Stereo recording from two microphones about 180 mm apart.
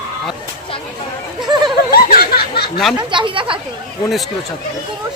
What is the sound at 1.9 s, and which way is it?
Snicker, 55° left (ahead or behind).